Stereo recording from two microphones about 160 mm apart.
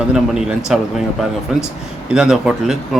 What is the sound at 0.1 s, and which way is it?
Speech, 5° right (ahead or behind).